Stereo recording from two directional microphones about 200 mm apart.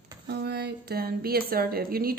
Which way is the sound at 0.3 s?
55° right (ahead or behind).